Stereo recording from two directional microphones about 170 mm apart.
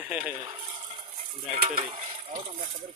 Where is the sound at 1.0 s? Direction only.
30° right (ahead or behind).